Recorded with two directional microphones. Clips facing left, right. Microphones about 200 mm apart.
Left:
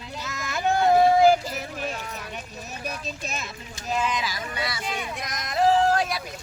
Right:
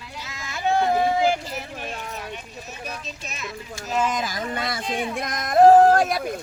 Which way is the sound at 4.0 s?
45° right (ahead or behind).